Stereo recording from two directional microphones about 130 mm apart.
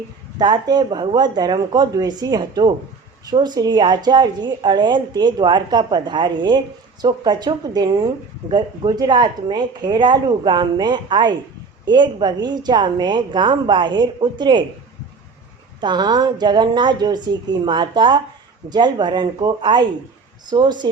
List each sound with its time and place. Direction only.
0.3 s speech: 35° right (ahead or behind)
15.8 s speech: 35° right (ahead or behind)